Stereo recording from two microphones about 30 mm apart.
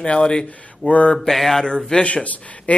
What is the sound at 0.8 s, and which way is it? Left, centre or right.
Speech, left.